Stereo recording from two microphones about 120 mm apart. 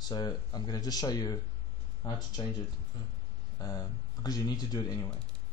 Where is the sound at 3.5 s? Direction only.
35° left (ahead or behind).